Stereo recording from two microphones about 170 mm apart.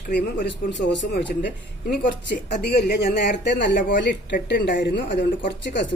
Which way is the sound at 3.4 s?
90° left.